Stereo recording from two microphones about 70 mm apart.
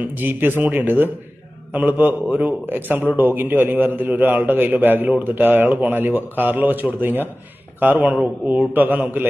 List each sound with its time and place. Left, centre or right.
0.0 s a man's voice: right